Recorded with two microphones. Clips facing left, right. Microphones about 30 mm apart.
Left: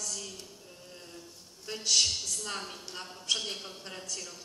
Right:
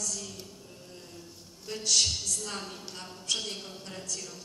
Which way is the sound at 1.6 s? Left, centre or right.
Centre.